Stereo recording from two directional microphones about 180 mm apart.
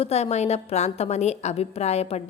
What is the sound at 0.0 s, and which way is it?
A woman's voice, 35° left (ahead or behind).